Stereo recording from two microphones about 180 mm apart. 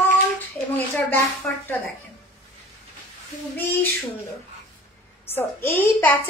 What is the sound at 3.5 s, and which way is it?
Speech, 10° left (ahead or behind).